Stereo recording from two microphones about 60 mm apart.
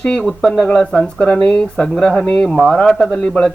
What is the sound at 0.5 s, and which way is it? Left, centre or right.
A man's voice, centre.